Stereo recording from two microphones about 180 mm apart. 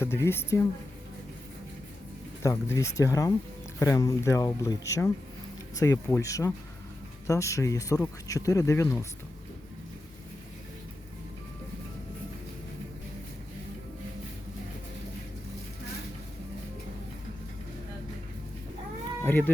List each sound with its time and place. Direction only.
0.0 s speech: 15° left (ahead or behind)
2.4 s speech: 15° left (ahead or behind)
19.2 s speech: 10° left (ahead or behind)